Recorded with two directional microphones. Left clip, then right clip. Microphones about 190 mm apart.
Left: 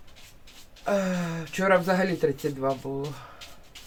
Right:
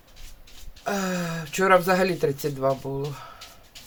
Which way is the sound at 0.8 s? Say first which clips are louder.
Left 1 dB; 35° right (ahead or behind).